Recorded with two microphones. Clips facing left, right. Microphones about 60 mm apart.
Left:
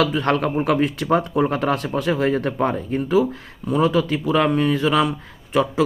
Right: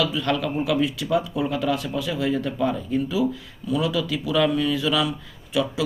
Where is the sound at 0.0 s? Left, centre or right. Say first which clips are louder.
Left 4 dB; left.